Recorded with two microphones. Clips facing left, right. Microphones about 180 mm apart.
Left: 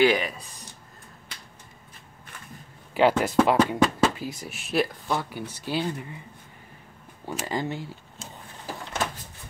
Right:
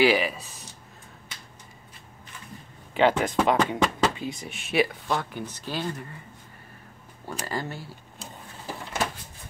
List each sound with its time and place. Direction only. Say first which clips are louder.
0.0 s speech: even; 5° right (ahead or behind)
2.9 s speech: left 1 dB; 5° left (ahead or behind)
7.2 s speech: left 3 dB; 15° left (ahead or behind)